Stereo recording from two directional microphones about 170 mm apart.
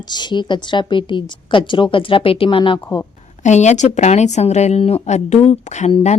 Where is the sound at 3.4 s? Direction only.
45° left (ahead or behind).